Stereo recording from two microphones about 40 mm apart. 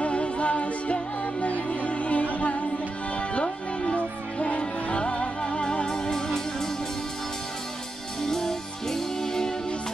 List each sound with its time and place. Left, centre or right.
0.0 s music: left
3.9 s music: left; by 6.7 s centre
8.2 s music: centre